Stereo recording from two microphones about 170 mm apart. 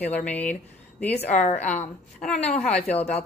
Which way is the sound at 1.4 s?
45° left (ahead or behind).